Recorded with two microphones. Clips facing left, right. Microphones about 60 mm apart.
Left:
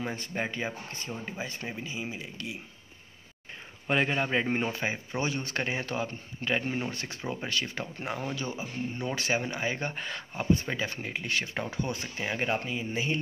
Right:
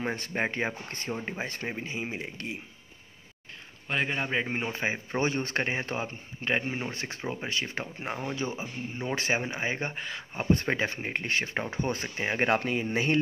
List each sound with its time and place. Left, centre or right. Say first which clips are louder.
0.0 s speech: right 3 dB; right
3.9 s a man's voice: left 2 dB; centre
4.7 s speech: right 2 dB; right
6.6 s speech: left 1 dB; centre
6.9 s speech: right 1 dB; right
9.9 s a man's voice: even; centre
10.5 s speech: right 2 dB; right
10.9 s speech: right 2 dB; right
12.5 s speech: right 4 dB; right